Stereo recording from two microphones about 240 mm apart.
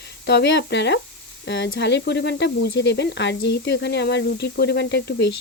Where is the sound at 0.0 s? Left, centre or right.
Left.